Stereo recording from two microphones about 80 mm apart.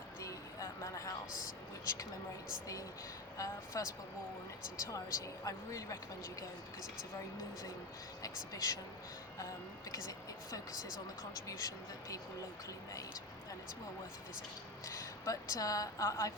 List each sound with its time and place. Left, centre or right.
0.2 s a sound: left
3.3 s a woman's voice: left
8.5 s a woman's voice: left
9.9 s a woman's voice: left
14.8 s a woman's voice: left